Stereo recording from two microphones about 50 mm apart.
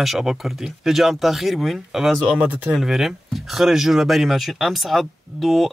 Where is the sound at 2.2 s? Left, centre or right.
Right.